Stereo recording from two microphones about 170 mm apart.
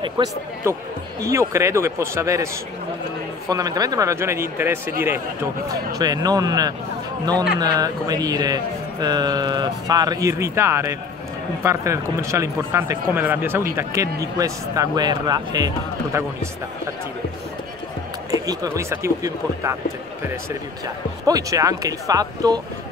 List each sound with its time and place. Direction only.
0.2 s speech: 25° right (ahead or behind)
0.7 s speech: 15° right (ahead or behind)
18.3 s speech: 20° right (ahead or behind)
21.3 s speech: 20° right (ahead or behind)